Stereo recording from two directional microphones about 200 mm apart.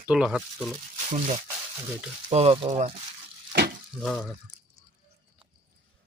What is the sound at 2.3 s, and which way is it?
Speech, 30° right (ahead or behind).